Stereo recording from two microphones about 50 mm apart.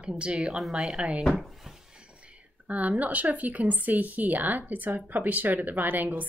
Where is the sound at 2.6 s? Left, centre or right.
Right.